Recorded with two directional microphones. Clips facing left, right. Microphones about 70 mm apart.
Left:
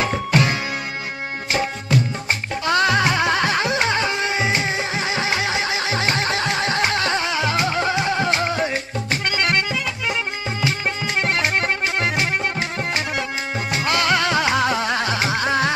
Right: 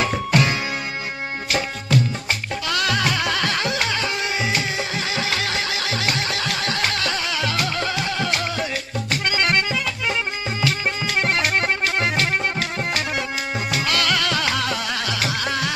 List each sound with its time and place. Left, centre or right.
2.6 s music: left
11.4 s music: left
13.7 s music: left